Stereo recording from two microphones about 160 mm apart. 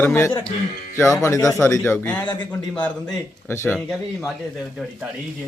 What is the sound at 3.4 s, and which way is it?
Speech, 15° left (ahead or behind).